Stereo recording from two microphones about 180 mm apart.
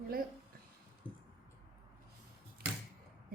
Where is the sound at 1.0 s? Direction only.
25° left (ahead or behind).